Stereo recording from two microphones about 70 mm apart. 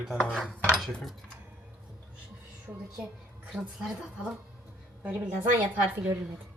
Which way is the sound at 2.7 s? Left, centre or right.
Centre.